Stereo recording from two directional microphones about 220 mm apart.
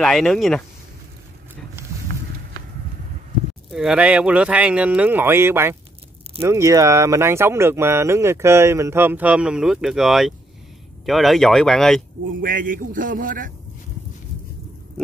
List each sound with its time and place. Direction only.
0.0 s speech: centre (ahead or behind)
3.7 s speech: 5° right (ahead or behind)
12.4 s a man's voice: 40° right (ahead or behind)